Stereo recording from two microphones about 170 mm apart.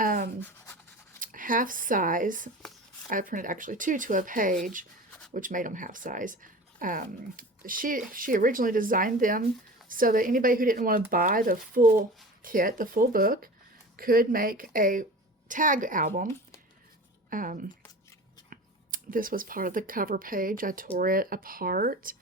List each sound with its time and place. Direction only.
0.0 s a sound: 55° right (ahead or behind)
0.3 s scratch: 10° left (ahead or behind)
1.2 s speech: 50° right (ahead or behind)
17.2 s speech: 50° right (ahead or behind)